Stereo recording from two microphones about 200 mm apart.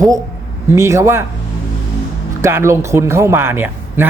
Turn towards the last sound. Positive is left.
turn(degrees=-10)  # may be behind; listen again after turning